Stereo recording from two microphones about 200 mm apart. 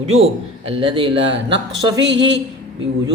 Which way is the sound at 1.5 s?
65° right (ahead or behind).